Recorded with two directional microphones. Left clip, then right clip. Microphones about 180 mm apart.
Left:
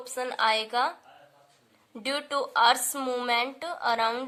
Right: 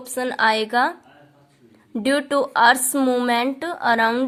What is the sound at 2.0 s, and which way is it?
Speech, 25° right (ahead or behind).